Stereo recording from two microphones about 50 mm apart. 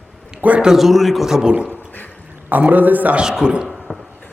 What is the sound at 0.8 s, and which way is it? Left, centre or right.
Speech, centre.